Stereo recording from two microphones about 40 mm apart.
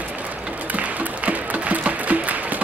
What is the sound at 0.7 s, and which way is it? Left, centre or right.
Music, right.